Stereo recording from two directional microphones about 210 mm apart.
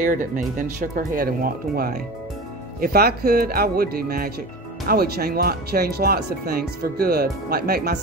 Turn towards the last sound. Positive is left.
turn(degrees=-50)  # may be behind; listen again after turning